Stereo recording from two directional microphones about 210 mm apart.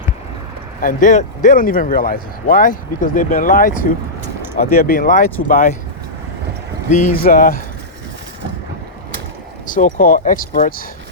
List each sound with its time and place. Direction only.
0.8 s speech: 40° left (ahead or behind)
6.9 s speech: 40° left (ahead or behind)
9.6 s speech: 40° left (ahead or behind)